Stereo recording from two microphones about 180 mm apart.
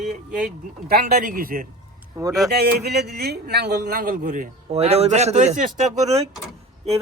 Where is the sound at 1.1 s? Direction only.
50° right (ahead or behind).